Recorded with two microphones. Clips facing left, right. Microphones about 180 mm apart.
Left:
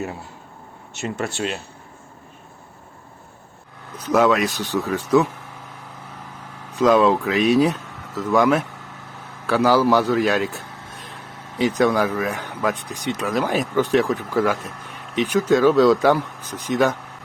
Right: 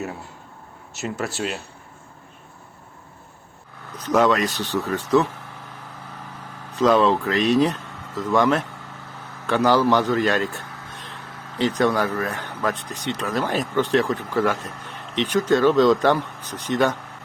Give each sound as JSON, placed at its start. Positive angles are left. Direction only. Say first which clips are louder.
{"t": 0.9, "sound": "speech", "louder": "left 1 dB", "side_deg": 0}
{"t": 3.9, "sound": "speech", "louder": "left 1 dB", "side_deg": 10}
{"t": 6.7, "sound": "speech", "louder": "left 2 dB", "side_deg": 10}